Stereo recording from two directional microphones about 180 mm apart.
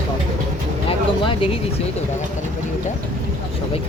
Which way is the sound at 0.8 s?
30° left (ahead or behind).